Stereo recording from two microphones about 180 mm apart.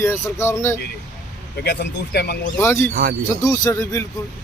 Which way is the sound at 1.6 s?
65° left (ahead or behind).